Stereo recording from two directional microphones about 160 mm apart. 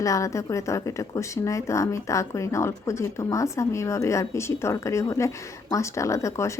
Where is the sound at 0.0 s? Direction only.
20° left (ahead or behind).